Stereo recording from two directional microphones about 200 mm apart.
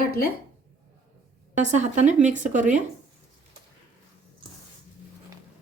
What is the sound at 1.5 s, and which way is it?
Speech, 35° right (ahead or behind).